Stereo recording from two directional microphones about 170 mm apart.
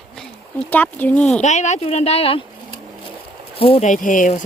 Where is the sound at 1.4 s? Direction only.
45° left (ahead or behind).